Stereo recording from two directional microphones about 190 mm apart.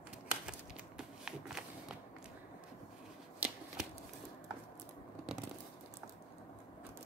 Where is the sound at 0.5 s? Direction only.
5° right (ahead or behind).